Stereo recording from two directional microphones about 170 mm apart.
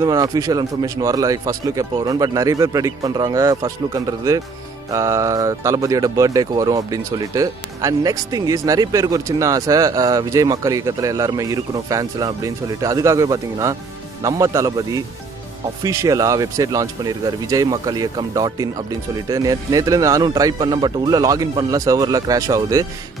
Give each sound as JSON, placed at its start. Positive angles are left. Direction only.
{"t": 0.0, "sound": "speech", "side_deg": -20}